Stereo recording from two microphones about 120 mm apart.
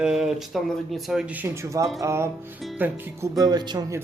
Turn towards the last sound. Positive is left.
turn(degrees=-35)  # may be behind; listen again after turning